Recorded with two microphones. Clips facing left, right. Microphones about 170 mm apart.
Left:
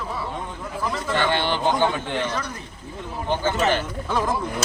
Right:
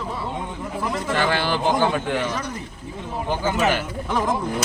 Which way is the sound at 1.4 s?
5° right (ahead or behind).